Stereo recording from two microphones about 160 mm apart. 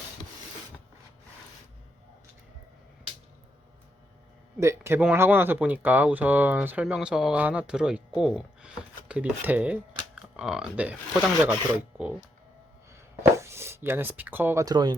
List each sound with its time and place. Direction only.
4.6 s speech: 15° right (ahead or behind)
13.3 s speech: 15° right (ahead or behind)